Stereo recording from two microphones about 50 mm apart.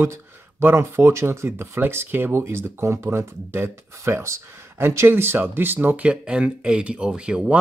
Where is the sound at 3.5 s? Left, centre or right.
Right.